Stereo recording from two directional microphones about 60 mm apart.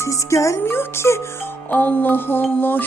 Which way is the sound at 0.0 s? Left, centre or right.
Left.